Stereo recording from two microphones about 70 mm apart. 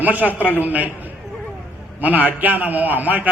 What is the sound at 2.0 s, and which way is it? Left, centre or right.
A man's voice, right.